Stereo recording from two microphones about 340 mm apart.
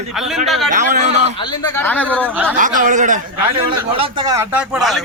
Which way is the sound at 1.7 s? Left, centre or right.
Centre.